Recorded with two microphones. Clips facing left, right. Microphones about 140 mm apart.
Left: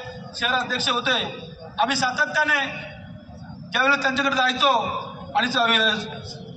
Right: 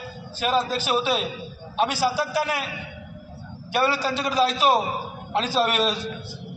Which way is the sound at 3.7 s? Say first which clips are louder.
Even; 40° right (ahead or behind).